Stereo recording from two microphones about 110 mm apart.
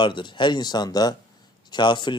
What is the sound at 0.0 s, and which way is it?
Speech, 45° left (ahead or behind).